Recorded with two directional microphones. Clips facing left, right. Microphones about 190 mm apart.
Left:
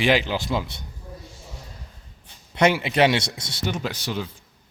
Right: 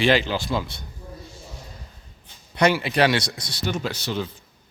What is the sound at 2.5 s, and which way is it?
Speech, 25° left (ahead or behind).